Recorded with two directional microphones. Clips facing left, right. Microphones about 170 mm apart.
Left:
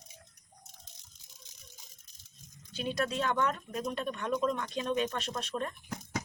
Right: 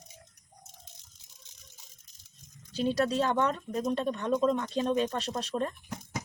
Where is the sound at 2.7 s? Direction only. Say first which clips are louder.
Right 6 dB; 35° right (ahead or behind).